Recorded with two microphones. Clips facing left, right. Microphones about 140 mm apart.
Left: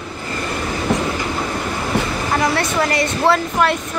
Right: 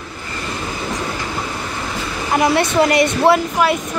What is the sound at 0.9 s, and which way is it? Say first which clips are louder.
Train: left 8 dB; 70° left (ahead or behind).